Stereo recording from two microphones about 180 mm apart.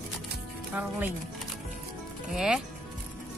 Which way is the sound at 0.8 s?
10° right (ahead or behind).